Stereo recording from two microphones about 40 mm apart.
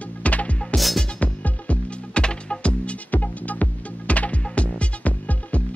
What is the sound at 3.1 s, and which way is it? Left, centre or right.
Music, left.